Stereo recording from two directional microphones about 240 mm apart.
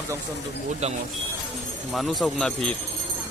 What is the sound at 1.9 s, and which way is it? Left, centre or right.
Speech, centre.